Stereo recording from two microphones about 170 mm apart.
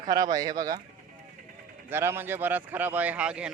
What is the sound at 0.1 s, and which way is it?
Speech, 20° right (ahead or behind).